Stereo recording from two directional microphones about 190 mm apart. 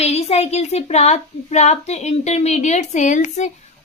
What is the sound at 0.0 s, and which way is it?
Speech, 35° left (ahead or behind).